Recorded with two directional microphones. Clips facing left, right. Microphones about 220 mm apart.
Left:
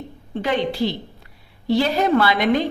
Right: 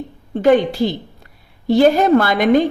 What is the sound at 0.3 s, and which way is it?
A woman's voice, 45° right (ahead or behind).